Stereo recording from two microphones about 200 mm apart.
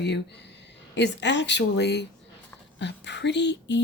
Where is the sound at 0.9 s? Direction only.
60° left (ahead or behind).